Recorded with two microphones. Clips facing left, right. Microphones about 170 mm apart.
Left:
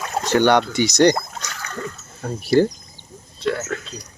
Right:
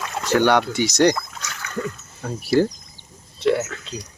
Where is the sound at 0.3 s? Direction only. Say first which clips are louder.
Left 1 dB; 5° right (ahead or behind).